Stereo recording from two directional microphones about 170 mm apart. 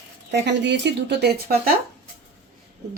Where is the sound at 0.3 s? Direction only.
90° right; by 1.7 s 70° right (ahead or behind).